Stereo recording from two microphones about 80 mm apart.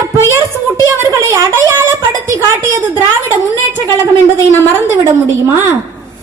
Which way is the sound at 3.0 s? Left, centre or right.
Right.